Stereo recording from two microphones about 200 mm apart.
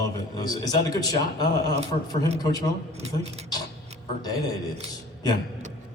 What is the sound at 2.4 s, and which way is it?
Speech, 20° left (ahead or behind).